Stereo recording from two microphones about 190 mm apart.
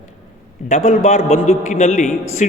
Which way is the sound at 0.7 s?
35° left (ahead or behind).